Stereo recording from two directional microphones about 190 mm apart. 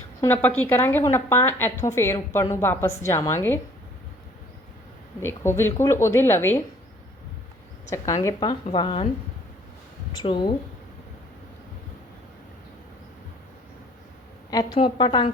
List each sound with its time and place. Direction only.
0.2 s a woman's voice: 10° left (ahead or behind)
5.2 s a woman's voice: 15° left (ahead or behind)
7.9 s a woman's voice: 15° left (ahead or behind)
10.2 s speech: 35° left (ahead or behind)
14.5 s a woman's voice: 20° left (ahead or behind)